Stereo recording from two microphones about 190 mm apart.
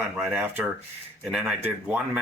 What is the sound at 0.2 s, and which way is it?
Speech, 5° right (ahead or behind).